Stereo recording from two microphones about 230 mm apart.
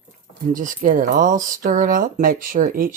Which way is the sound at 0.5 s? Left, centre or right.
Right.